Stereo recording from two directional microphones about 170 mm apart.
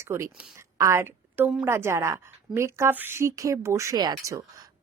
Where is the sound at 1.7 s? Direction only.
15° right (ahead or behind).